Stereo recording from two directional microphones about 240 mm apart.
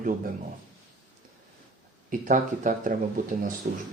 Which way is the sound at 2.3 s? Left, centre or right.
Right.